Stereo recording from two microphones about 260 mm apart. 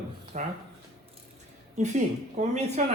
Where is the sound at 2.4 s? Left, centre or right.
Right.